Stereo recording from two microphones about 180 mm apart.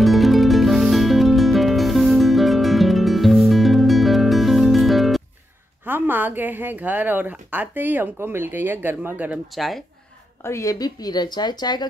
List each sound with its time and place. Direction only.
0.0 s music: centre (ahead or behind)
5.9 s a woman's voice: 10° right (ahead or behind)
10.4 s a woman's voice: 15° left (ahead or behind)